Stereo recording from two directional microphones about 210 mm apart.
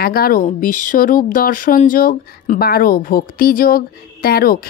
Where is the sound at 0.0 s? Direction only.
45° left (ahead or behind).